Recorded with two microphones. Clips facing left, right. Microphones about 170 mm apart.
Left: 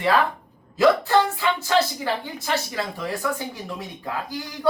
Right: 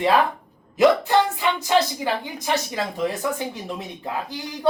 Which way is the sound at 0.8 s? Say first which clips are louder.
Right 1 dB; 20° right (ahead or behind).